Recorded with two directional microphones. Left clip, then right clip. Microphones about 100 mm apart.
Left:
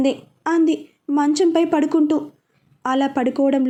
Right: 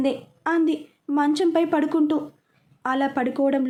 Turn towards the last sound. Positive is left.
turn(degrees=25)  # may be behind; listen again after turning